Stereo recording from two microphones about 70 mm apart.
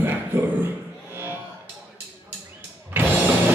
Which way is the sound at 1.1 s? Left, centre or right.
Right.